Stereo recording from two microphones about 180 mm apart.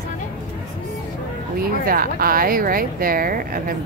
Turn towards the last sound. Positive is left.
turn(degrees=-50)  # may be behind; listen again after turning